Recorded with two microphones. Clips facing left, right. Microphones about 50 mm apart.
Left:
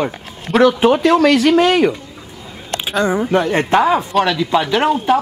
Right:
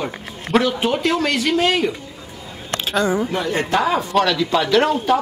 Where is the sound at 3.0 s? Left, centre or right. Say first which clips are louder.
Left 3 dB; centre.